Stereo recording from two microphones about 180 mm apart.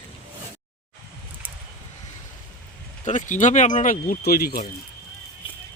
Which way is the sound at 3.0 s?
45° left (ahead or behind).